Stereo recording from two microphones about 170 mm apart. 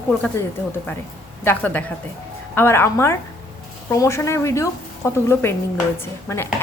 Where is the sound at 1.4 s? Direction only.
10° left (ahead or behind).